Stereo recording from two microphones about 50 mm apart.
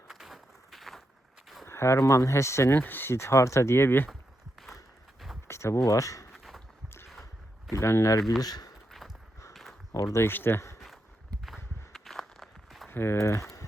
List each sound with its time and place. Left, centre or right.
0.1 s a sound: centre
1.6 s speech: left
2.7 s speech: left
3.1 s speech: left
5.5 s speech: left
6.3 s a sound: centre
6.8 s boat: left
7.7 s speech: left
8.9 s walk: centre
10.0 s speech: left
10.2 s speech: left
10.8 s walk: centre
12.9 s speech: left
13.1 s speech: left